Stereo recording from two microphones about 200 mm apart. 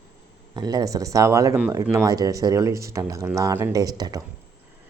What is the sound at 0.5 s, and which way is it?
Speech, 20° right (ahead or behind).